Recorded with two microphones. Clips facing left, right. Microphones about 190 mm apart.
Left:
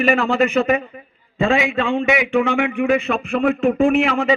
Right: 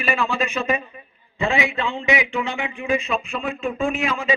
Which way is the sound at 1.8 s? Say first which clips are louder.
Left 4 dB; 55° left (ahead or behind).